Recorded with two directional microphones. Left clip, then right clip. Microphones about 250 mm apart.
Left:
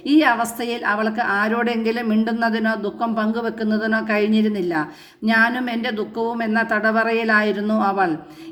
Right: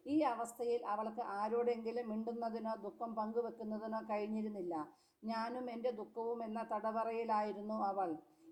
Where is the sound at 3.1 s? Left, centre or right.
Centre.